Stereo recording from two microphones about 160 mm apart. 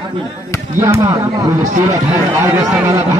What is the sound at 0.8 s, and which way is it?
Speech, 25° right (ahead or behind).